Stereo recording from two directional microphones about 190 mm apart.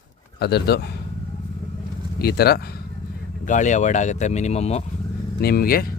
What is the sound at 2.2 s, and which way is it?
Speech, 55° left (ahead or behind).